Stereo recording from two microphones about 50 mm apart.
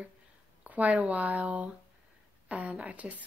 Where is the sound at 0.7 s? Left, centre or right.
Right.